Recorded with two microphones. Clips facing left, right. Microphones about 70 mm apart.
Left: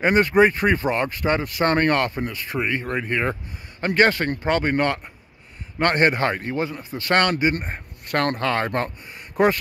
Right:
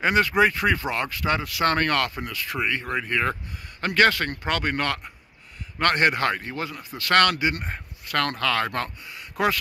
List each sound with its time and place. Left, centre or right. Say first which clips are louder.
0.0 s a man's voice: left 3 dB; left